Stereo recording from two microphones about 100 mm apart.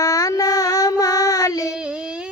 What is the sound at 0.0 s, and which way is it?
Child singing, 35° left (ahead or behind).